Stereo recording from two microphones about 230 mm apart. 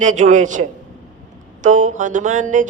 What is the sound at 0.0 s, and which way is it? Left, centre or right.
Speech, right.